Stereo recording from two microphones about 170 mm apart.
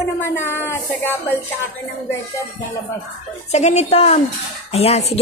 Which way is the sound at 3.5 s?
40° left (ahead or behind).